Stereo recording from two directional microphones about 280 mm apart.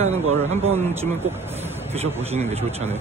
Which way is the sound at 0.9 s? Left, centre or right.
Centre.